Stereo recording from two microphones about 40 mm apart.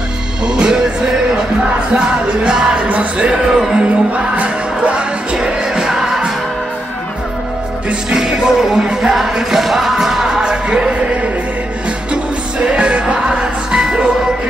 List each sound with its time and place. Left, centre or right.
0.5 s music: centre
3.8 s music: right
5.9 s music: centre
8.1 s music: centre
9.5 s music: centre; by 10.9 s right
12.1 s music: right